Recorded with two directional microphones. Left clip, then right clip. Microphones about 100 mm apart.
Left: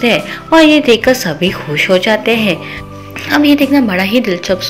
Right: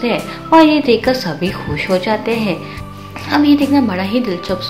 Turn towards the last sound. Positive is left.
turn(degrees=35)  # may be behind; listen again after turning